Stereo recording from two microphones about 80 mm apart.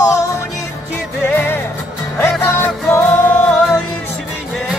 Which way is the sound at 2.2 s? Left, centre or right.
Left.